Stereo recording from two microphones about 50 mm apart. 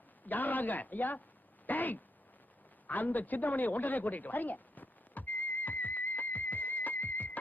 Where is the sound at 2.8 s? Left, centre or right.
Left.